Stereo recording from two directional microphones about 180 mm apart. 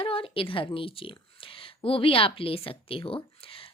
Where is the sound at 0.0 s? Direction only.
30° left (ahead or behind).